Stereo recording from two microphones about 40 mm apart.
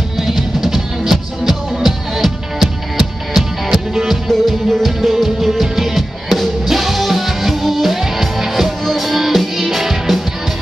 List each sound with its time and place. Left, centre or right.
0.2 s music: centre